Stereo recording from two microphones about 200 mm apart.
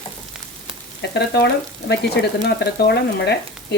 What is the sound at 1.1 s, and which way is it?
Frying, 55° left (ahead or behind).